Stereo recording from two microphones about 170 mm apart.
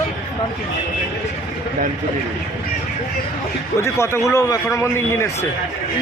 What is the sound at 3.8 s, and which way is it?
A man's voice, 15° left (ahead or behind).